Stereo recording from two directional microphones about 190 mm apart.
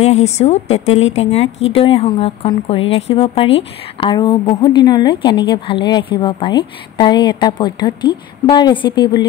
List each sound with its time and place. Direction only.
0.0 s a woman's voice: 35° left (ahead or behind)